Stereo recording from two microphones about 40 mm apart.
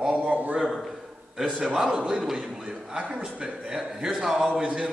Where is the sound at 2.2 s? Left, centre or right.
Centre.